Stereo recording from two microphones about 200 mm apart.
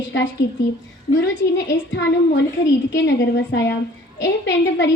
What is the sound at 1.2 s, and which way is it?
A woman's voice, 60° left (ahead or behind).